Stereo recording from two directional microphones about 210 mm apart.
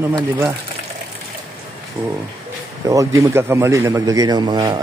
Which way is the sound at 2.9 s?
15° right (ahead or behind).